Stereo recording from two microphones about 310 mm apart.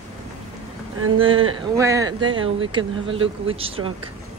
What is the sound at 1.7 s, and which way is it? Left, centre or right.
A woman's voice, centre.